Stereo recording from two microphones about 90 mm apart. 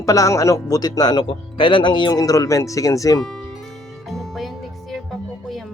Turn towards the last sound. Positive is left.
turn(degrees=0)  # may be behind; listen again after turning